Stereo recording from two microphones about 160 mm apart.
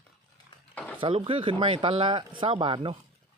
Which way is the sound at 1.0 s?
35° right (ahead or behind).